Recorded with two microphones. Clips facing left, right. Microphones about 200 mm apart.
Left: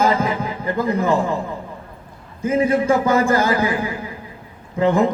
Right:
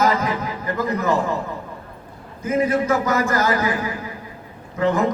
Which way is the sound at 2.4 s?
30° left (ahead or behind).